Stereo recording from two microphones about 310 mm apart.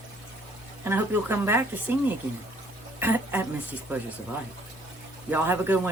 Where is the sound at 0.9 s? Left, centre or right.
Centre.